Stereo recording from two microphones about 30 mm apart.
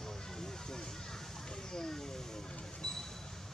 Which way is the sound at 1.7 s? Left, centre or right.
Left.